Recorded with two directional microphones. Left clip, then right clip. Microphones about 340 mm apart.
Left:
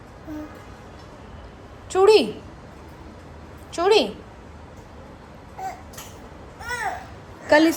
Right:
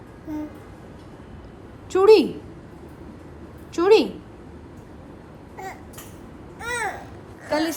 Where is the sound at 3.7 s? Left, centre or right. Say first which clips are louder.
Right 2 dB; centre.